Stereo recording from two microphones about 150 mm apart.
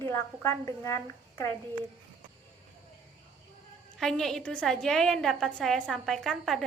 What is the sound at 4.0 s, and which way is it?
A woman's voice, 5° left (ahead or behind).